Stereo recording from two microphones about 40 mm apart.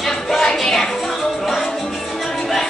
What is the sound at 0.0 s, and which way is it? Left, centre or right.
Music, centre.